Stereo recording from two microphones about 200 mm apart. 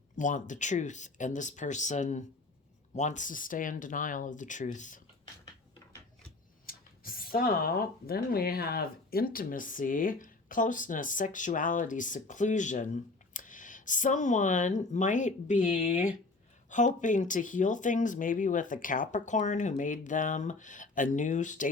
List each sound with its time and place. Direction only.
0.2 s speech: 40° left (ahead or behind)
6.7 s speech: 45° left (ahead or behind)